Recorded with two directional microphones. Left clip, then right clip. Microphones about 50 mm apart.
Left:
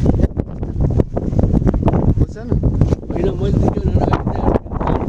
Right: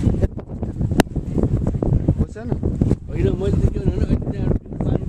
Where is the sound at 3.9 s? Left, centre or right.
Left.